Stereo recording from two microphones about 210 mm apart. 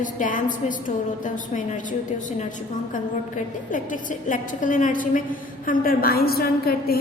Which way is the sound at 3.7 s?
40° left (ahead or behind).